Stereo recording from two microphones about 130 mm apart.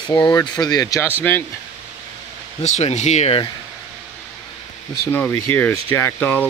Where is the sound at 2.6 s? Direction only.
60° left (ahead or behind).